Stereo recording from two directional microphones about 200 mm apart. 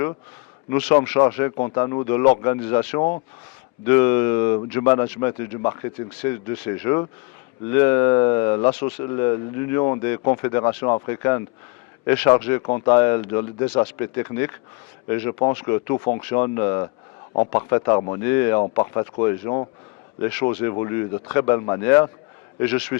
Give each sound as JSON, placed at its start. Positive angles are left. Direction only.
{"t": 0.7, "sound": "speech", "side_deg": 10}
{"t": 12.6, "sound": "speech", "side_deg": 20}